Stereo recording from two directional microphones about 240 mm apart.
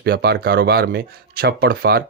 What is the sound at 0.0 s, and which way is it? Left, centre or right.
Speech, right.